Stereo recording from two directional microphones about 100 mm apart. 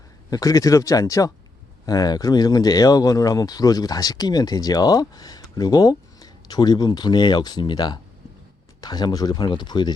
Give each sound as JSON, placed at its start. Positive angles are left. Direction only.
{"t": 0.3, "sound": "speech", "side_deg": 35}